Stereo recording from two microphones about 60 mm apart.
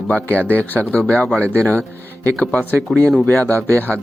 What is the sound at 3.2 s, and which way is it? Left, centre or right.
Speech, left.